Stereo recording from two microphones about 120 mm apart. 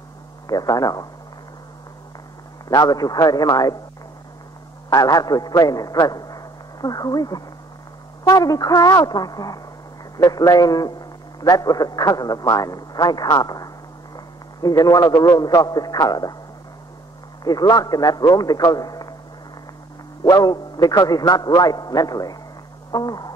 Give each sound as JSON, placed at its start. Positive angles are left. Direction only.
{"t": 0.5, "sound": "a man's voice", "side_deg": 30}
{"t": 2.7, "sound": "a man's voice", "side_deg": 30}
{"t": 4.8, "sound": "a man's voice", "side_deg": 30}
{"t": 17.4, "sound": "a man's voice", "side_deg": 35}
{"t": 20.2, "sound": "a man's voice", "side_deg": 35}
{"t": 22.8, "sound": "a sound", "side_deg": 35}